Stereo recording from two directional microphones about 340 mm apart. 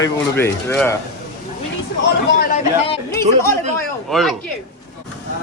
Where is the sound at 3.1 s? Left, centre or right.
Centre.